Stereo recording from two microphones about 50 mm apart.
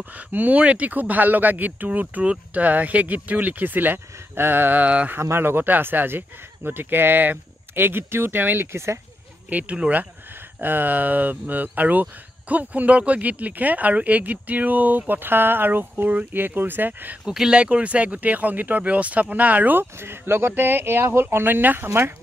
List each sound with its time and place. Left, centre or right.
0.3 s speech: right
5.4 s speech: right
8.7 s speech: right
9.5 s speech: right
10.6 s speech: right
17.3 s speech: centre
17.6 s speech: right